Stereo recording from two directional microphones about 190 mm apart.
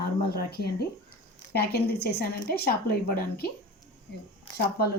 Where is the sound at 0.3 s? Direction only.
55° left (ahead or behind).